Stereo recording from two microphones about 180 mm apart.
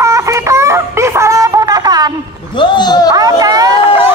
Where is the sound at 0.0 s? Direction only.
15° right (ahead or behind).